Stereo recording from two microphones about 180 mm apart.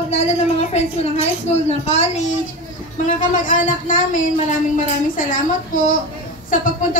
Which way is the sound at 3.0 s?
45° left (ahead or behind).